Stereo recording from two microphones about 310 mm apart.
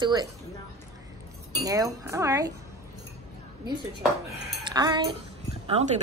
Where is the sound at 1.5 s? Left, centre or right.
Centre.